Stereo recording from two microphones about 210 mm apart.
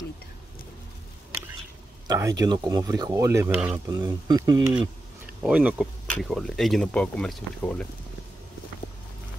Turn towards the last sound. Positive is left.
turn(degrees=5)  # may be behind; listen again after turning